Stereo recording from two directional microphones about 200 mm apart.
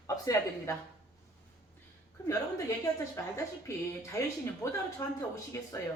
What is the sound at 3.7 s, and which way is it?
Speech, 15° left (ahead or behind).